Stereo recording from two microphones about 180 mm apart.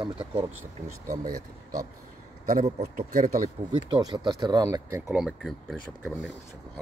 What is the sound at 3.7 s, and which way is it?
Speech, 25° right (ahead or behind).